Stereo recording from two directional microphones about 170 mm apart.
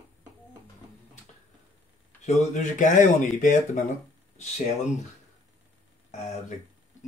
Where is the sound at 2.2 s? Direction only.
45° left (ahead or behind).